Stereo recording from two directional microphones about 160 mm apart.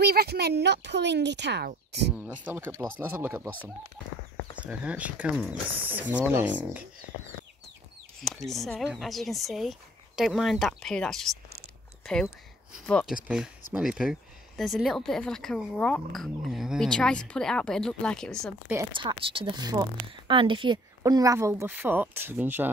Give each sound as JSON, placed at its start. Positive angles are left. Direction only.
{"t": 0.0, "sound": "a woman's voice", "side_deg": -75}
{"t": 2.4, "sound": "speech", "side_deg": -10}
{"t": 4.6, "sound": "speech", "side_deg": -10}
{"t": 8.2, "sound": "speech", "side_deg": 0}
{"t": 12.7, "sound": "speech", "side_deg": 5}
{"t": 18.9, "sound": "speech", "side_deg": -30}